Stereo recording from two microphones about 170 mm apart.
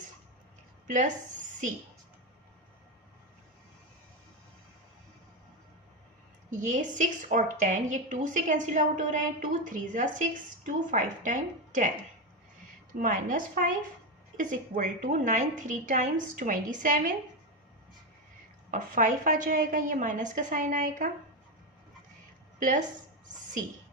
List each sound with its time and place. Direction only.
0.9 s speech: 45° right (ahead or behind)
6.5 s a woman's voice: 45° right (ahead or behind)
12.9 s a woman's voice: 50° right (ahead or behind)
18.7 s a woman's voice: 50° right (ahead or behind)